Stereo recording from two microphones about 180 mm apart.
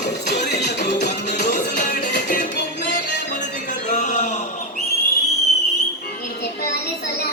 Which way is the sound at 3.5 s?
45° left (ahead or behind).